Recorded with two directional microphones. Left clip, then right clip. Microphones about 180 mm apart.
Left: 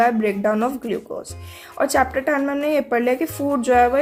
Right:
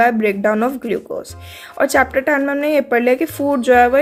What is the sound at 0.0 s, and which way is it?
Speech, 25° right (ahead or behind).